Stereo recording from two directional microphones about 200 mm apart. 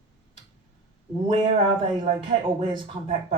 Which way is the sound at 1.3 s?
25° right (ahead or behind).